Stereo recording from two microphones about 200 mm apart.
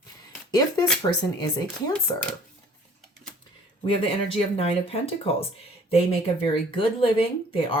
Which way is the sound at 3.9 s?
25° left (ahead or behind).